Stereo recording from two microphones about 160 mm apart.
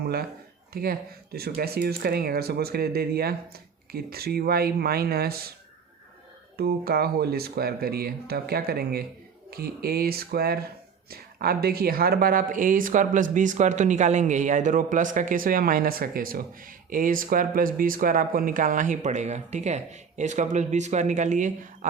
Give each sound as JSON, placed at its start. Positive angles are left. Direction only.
{"t": 0.0, "sound": "speech", "side_deg": -75}
{"t": 6.6, "sound": "speech", "side_deg": -75}